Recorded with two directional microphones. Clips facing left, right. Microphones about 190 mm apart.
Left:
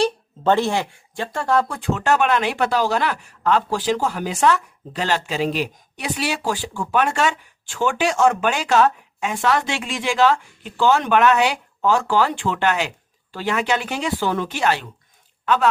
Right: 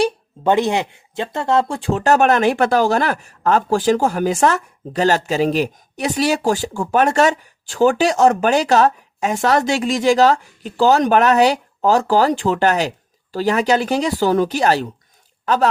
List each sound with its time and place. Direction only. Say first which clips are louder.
0.0 s a woman's voice: right 2 dB; 15° right (ahead or behind); by 15.7 s 40° right (ahead or behind)